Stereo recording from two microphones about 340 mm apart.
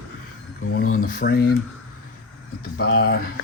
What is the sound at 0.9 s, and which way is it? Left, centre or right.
Speech, left.